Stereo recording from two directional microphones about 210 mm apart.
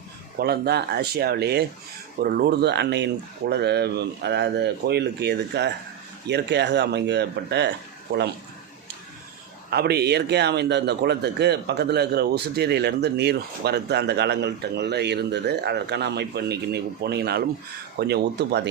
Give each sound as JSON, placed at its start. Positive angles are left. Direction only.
{"t": 0.3, "sound": "a man's voice", "side_deg": -50}
{"t": 9.6, "sound": "a man's voice", "side_deg": -50}